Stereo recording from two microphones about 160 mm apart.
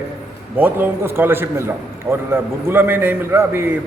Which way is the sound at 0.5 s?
10° right (ahead or behind).